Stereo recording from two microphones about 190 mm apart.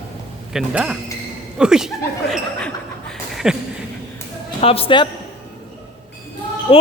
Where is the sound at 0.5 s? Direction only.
5° right (ahead or behind).